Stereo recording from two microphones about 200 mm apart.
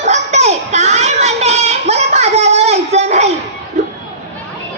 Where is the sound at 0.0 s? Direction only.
35° right (ahead or behind).